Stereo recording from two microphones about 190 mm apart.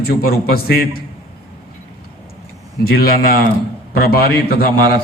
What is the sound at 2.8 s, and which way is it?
A man's voice, 55° left (ahead or behind).